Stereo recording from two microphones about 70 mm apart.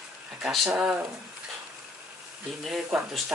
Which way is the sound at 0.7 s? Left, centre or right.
Centre.